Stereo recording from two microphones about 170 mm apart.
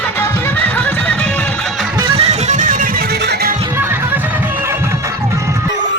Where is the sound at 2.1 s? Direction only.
40° right (ahead or behind).